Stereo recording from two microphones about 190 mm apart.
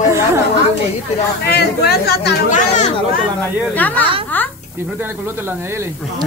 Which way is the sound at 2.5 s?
40° left (ahead or behind).